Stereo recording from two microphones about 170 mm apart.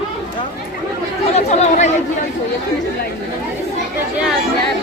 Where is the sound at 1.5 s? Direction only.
40° left (ahead or behind).